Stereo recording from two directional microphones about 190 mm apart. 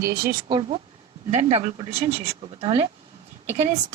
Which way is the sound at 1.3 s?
35° right (ahead or behind).